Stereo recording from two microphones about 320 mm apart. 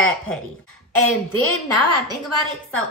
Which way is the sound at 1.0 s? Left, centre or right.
Left.